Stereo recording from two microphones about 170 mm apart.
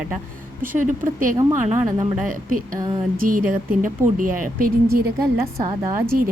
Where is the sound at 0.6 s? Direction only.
50° right (ahead or behind).